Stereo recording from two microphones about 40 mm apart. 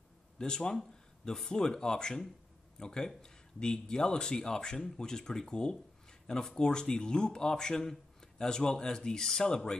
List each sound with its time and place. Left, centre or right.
0.4 s speech: centre